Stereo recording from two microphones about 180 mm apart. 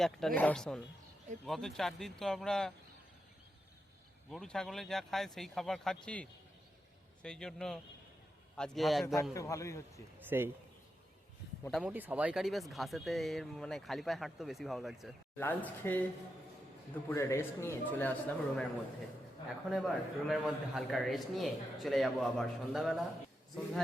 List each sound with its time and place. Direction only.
0.0 s speech: centre (ahead or behind)
4.3 s speech: 5° left (ahead or behind)
9.3 s a man's voice: 15° left (ahead or behind)
10.2 s speech: 10° right (ahead or behind)
11.7 s speech: 5° right (ahead or behind)
15.4 s a man's voice: 10° left (ahead or behind)
17.1 s a man's voice: 15° left (ahead or behind)
19.7 s speech: centre (ahead or behind)